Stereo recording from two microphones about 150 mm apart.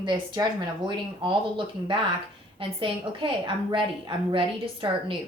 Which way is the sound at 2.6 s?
35° right (ahead or behind).